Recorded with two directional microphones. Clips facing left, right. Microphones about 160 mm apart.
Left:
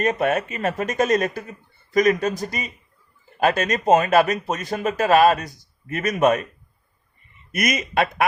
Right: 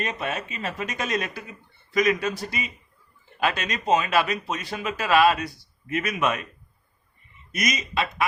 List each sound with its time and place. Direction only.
0.0 s speech: 50° left (ahead or behind)
7.5 s speech: 55° left (ahead or behind)